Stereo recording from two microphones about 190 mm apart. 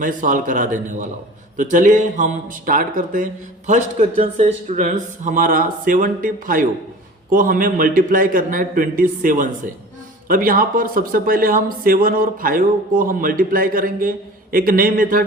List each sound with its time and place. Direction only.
0.0 s speech: 45° right (ahead or behind)